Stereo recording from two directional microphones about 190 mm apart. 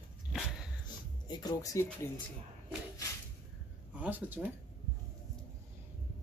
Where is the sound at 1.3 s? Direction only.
20° left (ahead or behind).